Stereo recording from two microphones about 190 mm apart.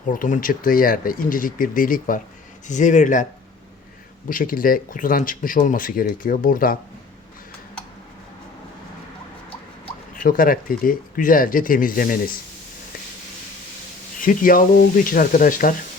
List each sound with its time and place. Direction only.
0.1 s speech: 45° left (ahead or behind)
4.3 s speech: 45° left (ahead or behind)
10.2 s speech: 45° left (ahead or behind)
14.2 s speech: 45° left (ahead or behind)